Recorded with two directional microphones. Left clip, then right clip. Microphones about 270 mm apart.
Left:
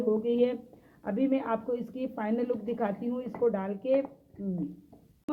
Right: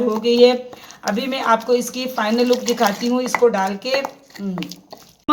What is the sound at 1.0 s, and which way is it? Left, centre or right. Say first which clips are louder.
Speech: right 9 dB; centre.